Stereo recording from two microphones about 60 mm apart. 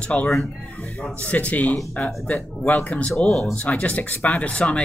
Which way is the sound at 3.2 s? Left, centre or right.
Centre.